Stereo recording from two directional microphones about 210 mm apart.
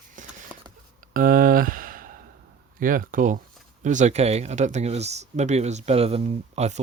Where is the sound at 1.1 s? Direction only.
40° right (ahead or behind).